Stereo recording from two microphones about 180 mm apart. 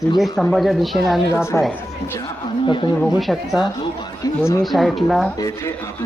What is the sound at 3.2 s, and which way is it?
Speech, centre (ahead or behind).